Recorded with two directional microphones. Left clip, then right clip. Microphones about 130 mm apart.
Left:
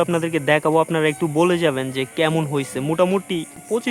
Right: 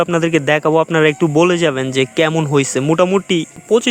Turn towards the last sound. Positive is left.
turn(degrees=-35)  # may be behind; listen again after turning